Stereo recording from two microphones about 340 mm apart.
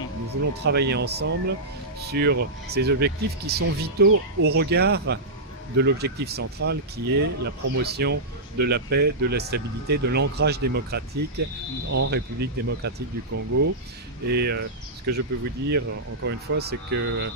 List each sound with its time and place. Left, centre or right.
0.3 s speech: right
13.3 s speech: right
14.3 s speech: right